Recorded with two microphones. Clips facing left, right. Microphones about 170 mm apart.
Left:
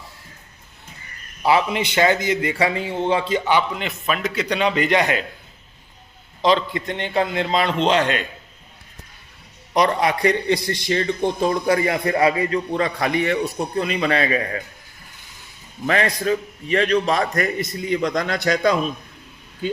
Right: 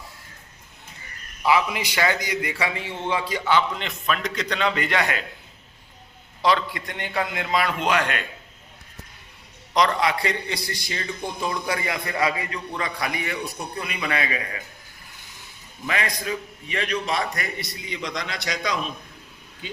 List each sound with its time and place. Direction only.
1.4 s a man's voice: 30° left (ahead or behind)
3.8 s a man's voice: 5° left (ahead or behind); by 5.2 s 20° left (ahead or behind)
6.4 s a man's voice: 25° left (ahead or behind)
9.7 s a man's voice: 30° left (ahead or behind)
10.2 s a man's voice: 45° left (ahead or behind)
11.2 s a man's voice: 30° left (ahead or behind)
15.9 s a man's voice: 40° left (ahead or behind)